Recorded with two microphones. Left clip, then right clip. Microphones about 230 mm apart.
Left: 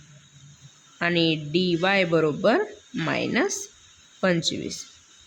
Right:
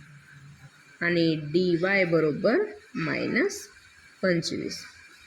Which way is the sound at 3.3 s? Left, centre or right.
Left.